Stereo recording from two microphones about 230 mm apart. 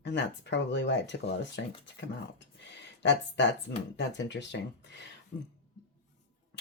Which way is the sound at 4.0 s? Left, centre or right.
Left.